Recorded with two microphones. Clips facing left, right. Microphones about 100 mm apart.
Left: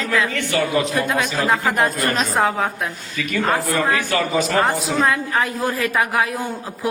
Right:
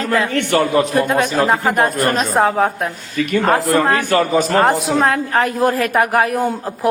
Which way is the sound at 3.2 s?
60° right (ahead or behind).